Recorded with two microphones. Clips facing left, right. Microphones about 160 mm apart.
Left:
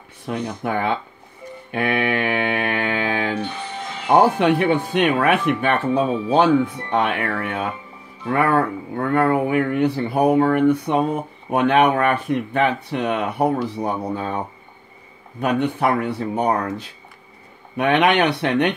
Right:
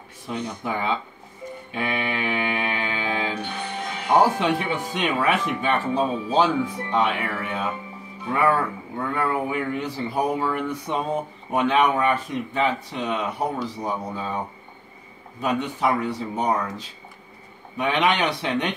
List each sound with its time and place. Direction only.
0.2 s speech: 60° left (ahead or behind)
1.7 s mantra: 60° left (ahead or behind)
4.2 s speech: 60° left (ahead or behind)
15.4 s speech: 60° left (ahead or behind)